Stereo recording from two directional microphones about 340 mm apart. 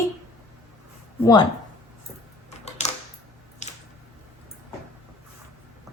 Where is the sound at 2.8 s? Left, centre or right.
Centre.